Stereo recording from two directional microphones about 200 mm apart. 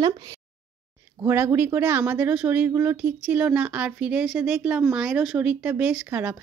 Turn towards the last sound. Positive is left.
turn(degrees=-10)  # may be behind; listen again after turning